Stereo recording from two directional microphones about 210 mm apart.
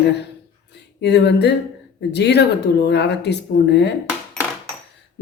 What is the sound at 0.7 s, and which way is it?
Speech, 55° left (ahead or behind).